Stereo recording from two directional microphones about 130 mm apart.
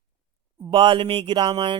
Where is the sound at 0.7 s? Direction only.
40° right (ahead or behind).